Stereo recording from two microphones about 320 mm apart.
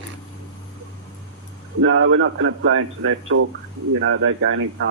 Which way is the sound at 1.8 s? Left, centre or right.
Right.